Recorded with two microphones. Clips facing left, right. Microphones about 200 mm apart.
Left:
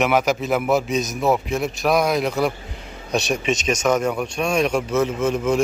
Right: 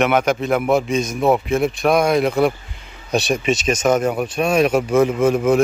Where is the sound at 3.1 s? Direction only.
35° right (ahead or behind).